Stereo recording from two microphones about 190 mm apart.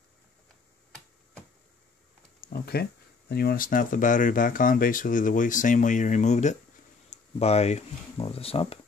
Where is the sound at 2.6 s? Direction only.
55° left (ahead or behind); by 8.7 s 30° left (ahead or behind).